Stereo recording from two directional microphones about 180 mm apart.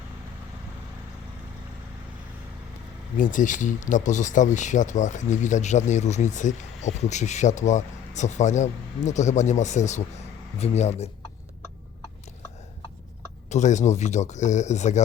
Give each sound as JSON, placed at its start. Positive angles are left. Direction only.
{"t": 3.2, "sound": "speech", "side_deg": 45}
{"t": 13.5, "sound": "speech", "side_deg": 40}